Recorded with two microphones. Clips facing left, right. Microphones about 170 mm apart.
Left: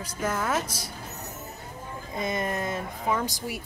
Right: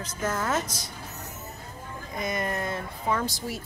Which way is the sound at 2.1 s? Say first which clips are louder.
Left 1 dB; 25° left (ahead or behind).